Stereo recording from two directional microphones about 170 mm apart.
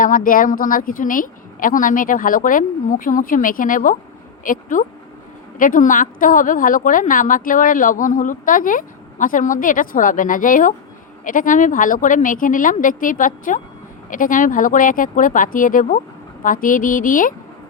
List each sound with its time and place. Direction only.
0.0 s a woman's voice: 55° left (ahead or behind)